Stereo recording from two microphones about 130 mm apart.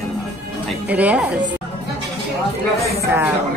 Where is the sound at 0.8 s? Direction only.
10° right (ahead or behind).